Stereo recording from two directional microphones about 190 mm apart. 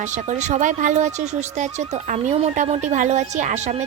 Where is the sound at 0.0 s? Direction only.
40° right (ahead or behind).